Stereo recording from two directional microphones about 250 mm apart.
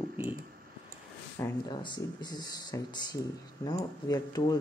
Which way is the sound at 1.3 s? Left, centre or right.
Centre.